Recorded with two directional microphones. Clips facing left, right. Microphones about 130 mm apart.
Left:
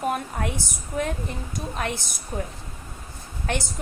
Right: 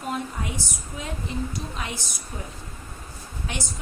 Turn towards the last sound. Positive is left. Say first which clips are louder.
# left 5 dB
turn(degrees=55)  # may be behind; listen again after turning